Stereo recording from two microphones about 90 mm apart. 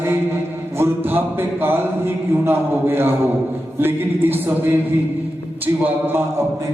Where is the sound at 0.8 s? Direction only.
25° right (ahead or behind).